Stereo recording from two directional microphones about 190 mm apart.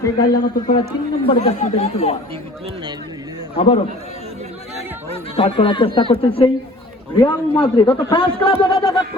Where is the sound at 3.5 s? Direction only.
30° left (ahead or behind).